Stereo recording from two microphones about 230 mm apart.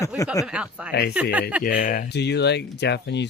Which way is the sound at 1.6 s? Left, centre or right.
Left.